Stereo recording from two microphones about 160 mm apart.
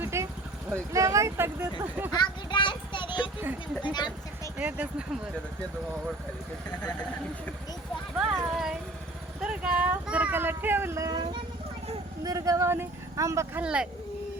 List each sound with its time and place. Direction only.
0.0 s vehicle: 15° right (ahead or behind)
0.7 s speech: 20° right (ahead or behind)
2.1 s a sound: 25° left (ahead or behind)
3.8 s speech: 25° left (ahead or behind)
4.5 s speech: 10° right (ahead or behind)
8.2 s speech: 5° right (ahead or behind); by 13.6 s 20° right (ahead or behind)
13.6 s speech: 5° right (ahead or behind)